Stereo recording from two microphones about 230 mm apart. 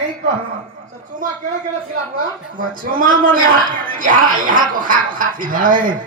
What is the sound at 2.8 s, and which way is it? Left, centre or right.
Speech, right.